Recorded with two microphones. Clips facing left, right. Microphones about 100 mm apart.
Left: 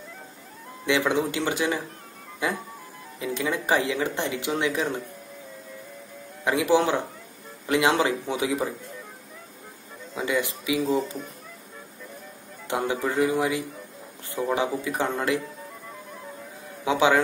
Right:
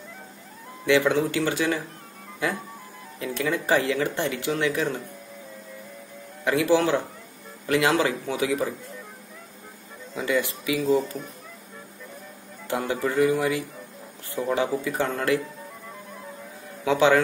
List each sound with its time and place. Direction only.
0.8 s speech: 20° left (ahead or behind)
6.4 s speech: 20° left (ahead or behind)
10.1 s speech: 20° left (ahead or behind)
12.6 s speech: 20° left (ahead or behind)
16.8 s speech: 15° left (ahead or behind)